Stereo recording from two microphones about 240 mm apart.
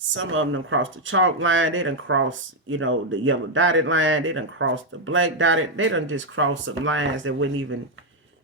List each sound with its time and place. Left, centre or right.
0.1 s speech: right